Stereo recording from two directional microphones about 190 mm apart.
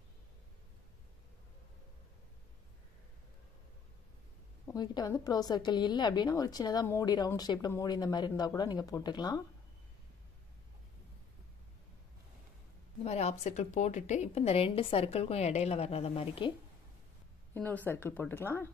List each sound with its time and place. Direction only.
4.7 s a woman's voice: 20° left (ahead or behind)
13.0 s a woman's voice: 35° left (ahead or behind)
17.6 s speech: 10° left (ahead or behind)